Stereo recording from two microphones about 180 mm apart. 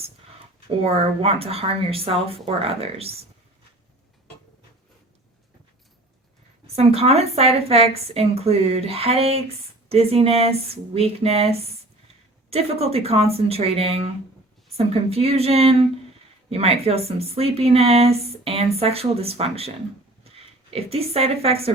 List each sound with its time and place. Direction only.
1.2 s speech: 35° right (ahead or behind)
6.7 s a woman's voice: 35° right (ahead or behind)